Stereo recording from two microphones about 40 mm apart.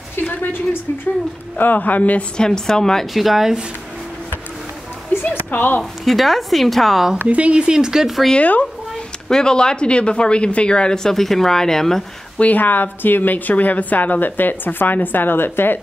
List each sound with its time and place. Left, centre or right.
0.1 s a woman's voice: left
1.6 s a woman's voice: left
2.3 s a woman's voice: centre
3.1 s a woman's voice: centre
5.2 s speech: left
6.0 s a woman's voice: centre
7.2 s speech: right; by 8.1 s centre
8.4 s speech: left
9.3 s speech: centre
12.4 s a woman's voice: left